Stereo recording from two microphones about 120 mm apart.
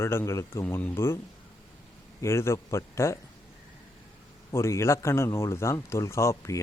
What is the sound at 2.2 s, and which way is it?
Speech, 20° left (ahead or behind).